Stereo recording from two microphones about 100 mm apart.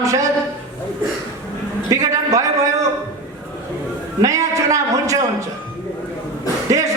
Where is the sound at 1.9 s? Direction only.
35° right (ahead or behind).